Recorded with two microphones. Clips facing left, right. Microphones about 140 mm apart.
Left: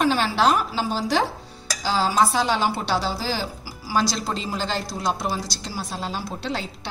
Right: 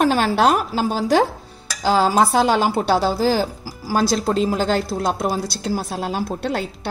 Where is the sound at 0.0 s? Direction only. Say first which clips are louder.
Right 4 dB; 50° right (ahead or behind).